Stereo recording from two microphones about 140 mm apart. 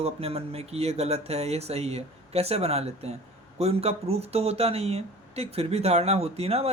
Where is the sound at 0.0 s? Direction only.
45° right (ahead or behind).